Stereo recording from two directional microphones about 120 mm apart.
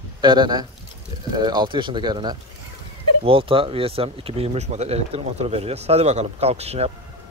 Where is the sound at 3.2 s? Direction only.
50° right (ahead or behind).